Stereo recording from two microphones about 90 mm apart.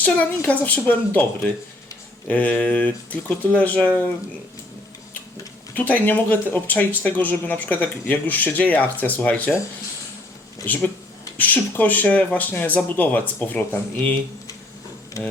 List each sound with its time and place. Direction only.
0.0 s speech: 15° left (ahead or behind)
5.7 s speech: 20° left (ahead or behind)
11.3 s speech: 20° left (ahead or behind)
15.2 s speech: 40° left (ahead or behind)